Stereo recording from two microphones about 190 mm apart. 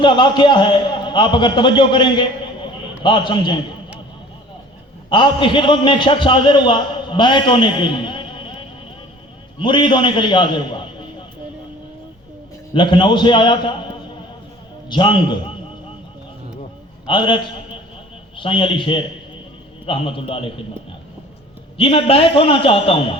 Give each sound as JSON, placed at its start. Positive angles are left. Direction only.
{"t": 0.0, "sound": "a man's voice", "side_deg": 25}
{"t": 5.0, "sound": "a man's voice", "side_deg": 25}
{"t": 9.6, "sound": "a man's voice", "side_deg": 25}
{"t": 12.7, "sound": "a man's voice", "side_deg": 25}
{"t": 14.8, "sound": "a man's voice", "side_deg": 25}
{"t": 17.1, "sound": "a man's voice", "side_deg": 25}
{"t": 21.8, "sound": "a man's voice", "side_deg": 30}